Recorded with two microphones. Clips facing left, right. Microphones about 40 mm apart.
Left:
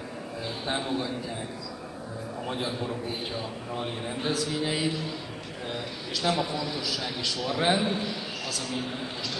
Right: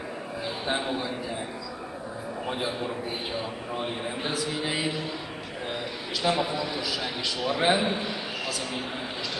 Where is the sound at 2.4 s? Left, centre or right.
Centre.